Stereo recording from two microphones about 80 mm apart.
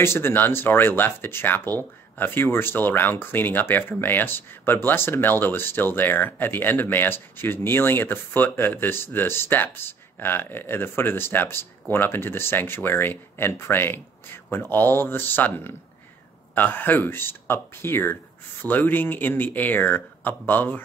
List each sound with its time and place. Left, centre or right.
0.0 s speech: left